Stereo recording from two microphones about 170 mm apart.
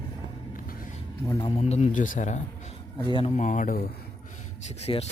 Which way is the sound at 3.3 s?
50° left (ahead or behind).